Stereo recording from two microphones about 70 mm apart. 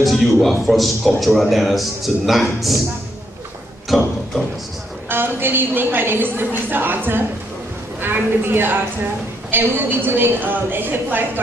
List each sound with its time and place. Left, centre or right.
0.0 s a man's voice: centre
3.9 s a sound: centre
5.1 s a woman's voice: right